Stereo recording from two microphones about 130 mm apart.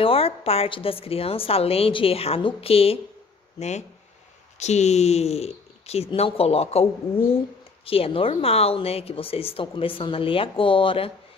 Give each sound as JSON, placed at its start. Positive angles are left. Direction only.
{"t": 0.0, "sound": "speech", "side_deg": 45}
{"t": 3.5, "sound": "speech", "side_deg": 60}